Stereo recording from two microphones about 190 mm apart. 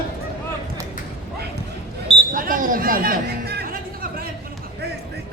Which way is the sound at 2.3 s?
45° right (ahead or behind).